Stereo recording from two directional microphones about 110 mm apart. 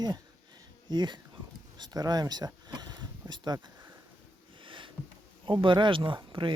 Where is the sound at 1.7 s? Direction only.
40° right (ahead or behind).